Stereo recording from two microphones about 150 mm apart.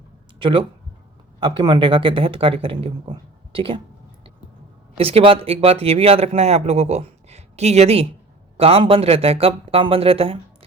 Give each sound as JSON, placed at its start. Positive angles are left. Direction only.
{"t": 0.3, "sound": "speech", "side_deg": -35}
{"t": 4.9, "sound": "speech", "side_deg": -40}